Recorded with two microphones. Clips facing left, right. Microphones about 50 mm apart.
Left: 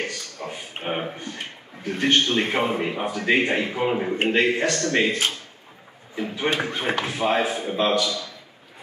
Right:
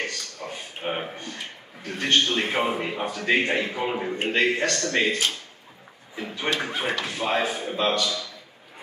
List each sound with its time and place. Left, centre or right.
0.0 s a sound: centre
1.9 s a man's voice: centre
6.3 s a man's voice: centre